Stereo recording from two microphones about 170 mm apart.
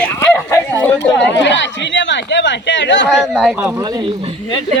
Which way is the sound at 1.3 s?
90° left.